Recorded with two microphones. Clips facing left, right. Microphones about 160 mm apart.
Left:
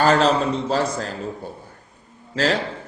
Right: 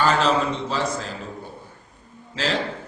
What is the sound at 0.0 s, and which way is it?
A man's voice, 40° left (ahead or behind).